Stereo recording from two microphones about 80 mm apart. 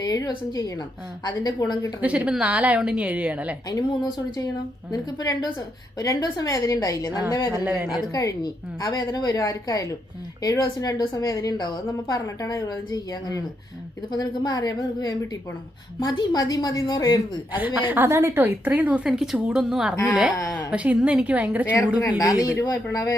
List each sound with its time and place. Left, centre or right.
0.0 s a woman's voice: left
2.0 s a woman's voice: centre
3.7 s a woman's voice: left
7.6 s a woman's voice: centre
7.9 s a woman's voice: left
11.1 s a woman's voice: left
17.7 s a woman's voice: right
19.0 s a woman's voice: centre
19.4 s a woman's voice: centre
22.2 s a woman's voice: left